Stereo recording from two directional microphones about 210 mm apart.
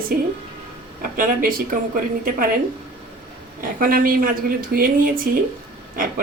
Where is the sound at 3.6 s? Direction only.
40° right (ahead or behind).